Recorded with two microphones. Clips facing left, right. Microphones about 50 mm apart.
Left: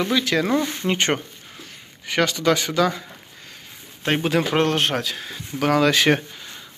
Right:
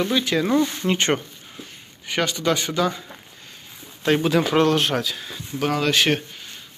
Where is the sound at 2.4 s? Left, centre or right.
Left.